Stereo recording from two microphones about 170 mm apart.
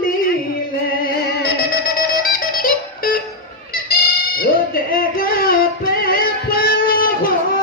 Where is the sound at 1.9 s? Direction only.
60° left (ahead or behind).